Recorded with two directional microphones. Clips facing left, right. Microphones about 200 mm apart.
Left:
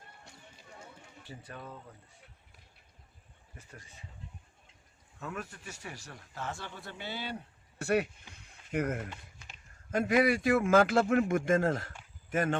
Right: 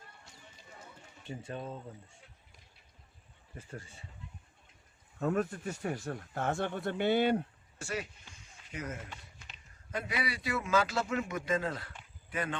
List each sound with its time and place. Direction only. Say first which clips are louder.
1.5 s speech: right 5 dB; 25° right (ahead or behind)
3.6 s speech: right 7 dB; 25° right (ahead or behind)
5.2 s speech: right 10 dB; 35° right (ahead or behind)
6.1 s speech: right 7 dB; 55° right (ahead or behind)
7.8 s speech: left 9 dB; 60° left (ahead or behind)
8.3 s a sound: left 11 dB; 60° left (ahead or behind)
9.5 s speech: left 5 dB; 45° left (ahead or behind)